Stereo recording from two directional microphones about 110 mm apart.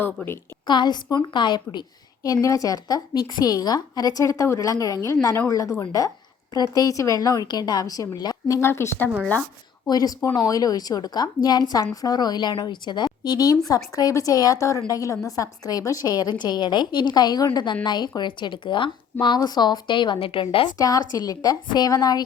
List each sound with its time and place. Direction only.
0.0 s a woman's voice: 20° left (ahead or behind)
0.7 s a woman's voice: 40° left (ahead or behind)
2.2 s a woman's voice: 35° left (ahead or behind)
9.9 s a woman's voice: 35° left (ahead or behind); by 20.7 s 55° left (ahead or behind)
20.7 s a woman's voice: 35° left (ahead or behind)